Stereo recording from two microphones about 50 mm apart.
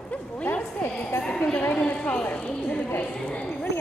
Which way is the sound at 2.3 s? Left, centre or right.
Left.